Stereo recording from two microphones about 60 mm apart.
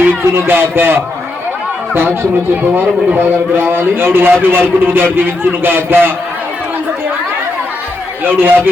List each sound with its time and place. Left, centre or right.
0.0 s speech: right
3.2 s a man's voice: right
8.2 s a man's voice: right